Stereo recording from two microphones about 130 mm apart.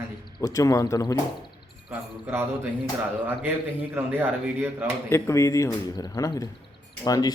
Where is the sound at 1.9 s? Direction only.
15° right (ahead or behind).